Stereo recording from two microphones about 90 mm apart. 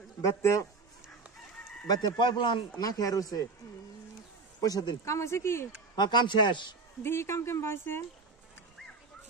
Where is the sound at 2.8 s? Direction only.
40° left (ahead or behind).